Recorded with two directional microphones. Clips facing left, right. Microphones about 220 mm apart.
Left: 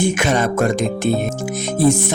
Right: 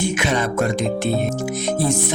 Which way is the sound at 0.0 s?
50° left (ahead or behind).